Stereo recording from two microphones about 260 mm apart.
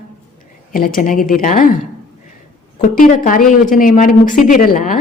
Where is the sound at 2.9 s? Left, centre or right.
Left.